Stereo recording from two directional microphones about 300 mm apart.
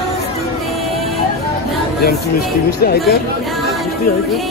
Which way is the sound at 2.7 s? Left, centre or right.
Left.